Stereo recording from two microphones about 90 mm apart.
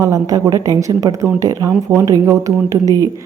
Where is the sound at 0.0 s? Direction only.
40° right (ahead or behind).